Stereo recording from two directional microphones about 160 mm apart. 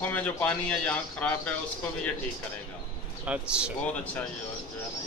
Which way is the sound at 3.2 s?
5° right (ahead or behind).